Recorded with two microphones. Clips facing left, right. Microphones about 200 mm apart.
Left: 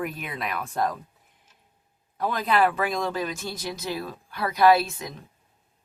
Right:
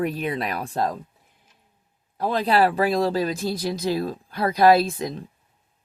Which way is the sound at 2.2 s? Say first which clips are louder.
Right 3 dB; 30° right (ahead or behind).